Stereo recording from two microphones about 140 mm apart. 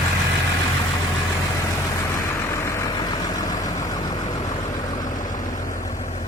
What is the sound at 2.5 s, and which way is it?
Vehicle, 20° left (ahead or behind).